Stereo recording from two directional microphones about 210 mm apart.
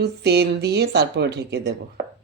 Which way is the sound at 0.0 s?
50° right (ahead or behind).